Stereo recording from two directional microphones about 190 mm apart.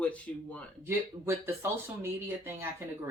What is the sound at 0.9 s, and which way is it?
Speech, 15° right (ahead or behind).